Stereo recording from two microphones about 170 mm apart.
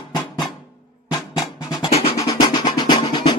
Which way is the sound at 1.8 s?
35° left (ahead or behind).